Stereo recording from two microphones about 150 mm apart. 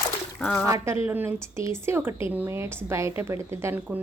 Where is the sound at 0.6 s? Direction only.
20° right (ahead or behind).